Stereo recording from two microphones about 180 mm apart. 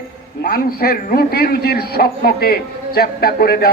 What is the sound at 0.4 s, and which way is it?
A man's voice, 55° left (ahead or behind).